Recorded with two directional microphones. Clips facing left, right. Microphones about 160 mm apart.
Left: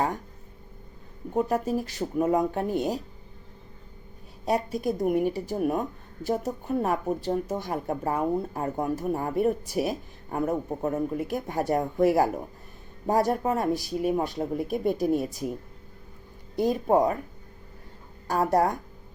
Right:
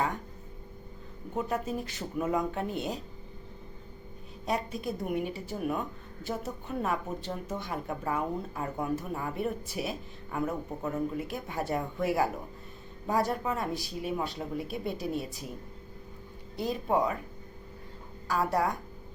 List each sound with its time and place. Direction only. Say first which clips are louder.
1.3 s speech: left 6 dB; 35° left (ahead or behind)
4.4 s speech: left 6 dB; 35° left (ahead or behind)
16.6 s speech: left 6 dB; 45° left (ahead or behind)
18.3 s speech: left 5 dB; 40° left (ahead or behind)